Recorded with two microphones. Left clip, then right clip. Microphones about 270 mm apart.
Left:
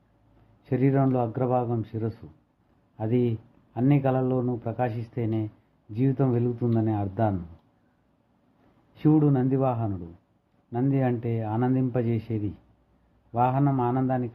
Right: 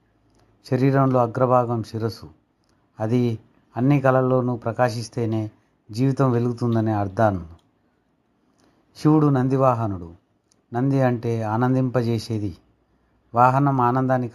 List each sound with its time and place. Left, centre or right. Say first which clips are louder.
0.7 s speech: right 5 dB; centre
9.0 s speech: right 4 dB; centre